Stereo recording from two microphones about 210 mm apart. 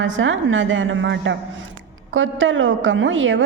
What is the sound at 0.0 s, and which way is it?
A woman's voice, 65° right (ahead or behind).